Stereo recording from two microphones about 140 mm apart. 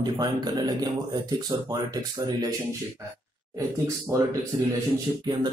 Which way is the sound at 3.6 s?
20° right (ahead or behind).